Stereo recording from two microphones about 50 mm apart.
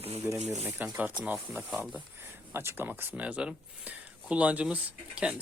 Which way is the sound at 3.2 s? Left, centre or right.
Right.